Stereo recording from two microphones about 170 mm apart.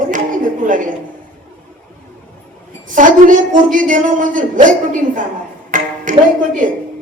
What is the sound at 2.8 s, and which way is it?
A woman's voice, 50° right (ahead or behind).